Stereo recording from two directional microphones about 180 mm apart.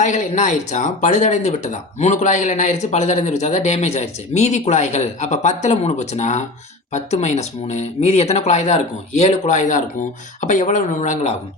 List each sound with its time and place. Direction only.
0.0 s speech: 40° left (ahead or behind)